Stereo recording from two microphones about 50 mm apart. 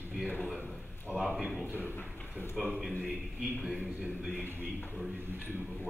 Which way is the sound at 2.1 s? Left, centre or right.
Left.